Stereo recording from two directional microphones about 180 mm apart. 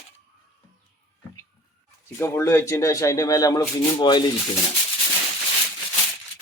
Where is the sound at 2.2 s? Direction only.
15° left (ahead or behind).